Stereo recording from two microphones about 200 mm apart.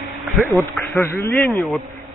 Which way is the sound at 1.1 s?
15° left (ahead or behind).